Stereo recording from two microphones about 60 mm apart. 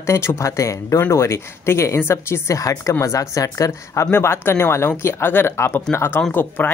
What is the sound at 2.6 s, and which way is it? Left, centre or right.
Speech, left.